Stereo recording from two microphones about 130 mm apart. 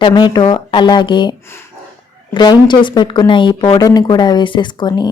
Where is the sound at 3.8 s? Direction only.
30° left (ahead or behind).